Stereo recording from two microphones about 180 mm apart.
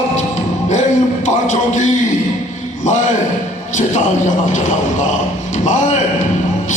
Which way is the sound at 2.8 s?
40° left (ahead or behind).